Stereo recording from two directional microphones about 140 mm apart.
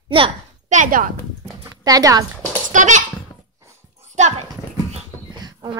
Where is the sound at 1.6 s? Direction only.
25° right (ahead or behind).